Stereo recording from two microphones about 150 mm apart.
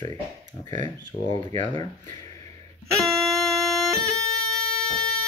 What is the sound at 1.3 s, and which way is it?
Speech, 25° left (ahead or behind).